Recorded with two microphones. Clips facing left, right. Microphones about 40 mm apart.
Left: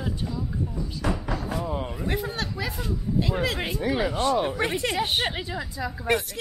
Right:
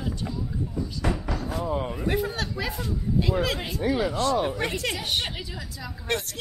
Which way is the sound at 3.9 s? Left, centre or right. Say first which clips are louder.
Left 1 dB; left.